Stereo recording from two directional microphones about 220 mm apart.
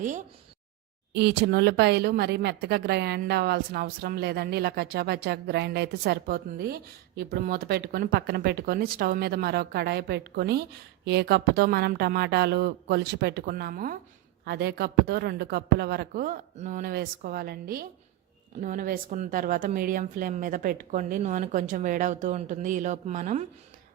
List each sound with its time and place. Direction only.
1.1 s speech: 50° right (ahead or behind); by 23.5 s 30° right (ahead or behind)